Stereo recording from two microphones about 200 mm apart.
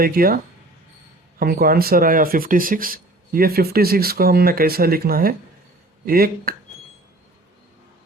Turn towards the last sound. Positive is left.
turn(degrees=-50)  # may be behind; listen again after turning